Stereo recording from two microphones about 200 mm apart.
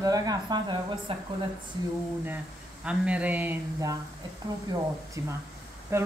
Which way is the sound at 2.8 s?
5° right (ahead or behind).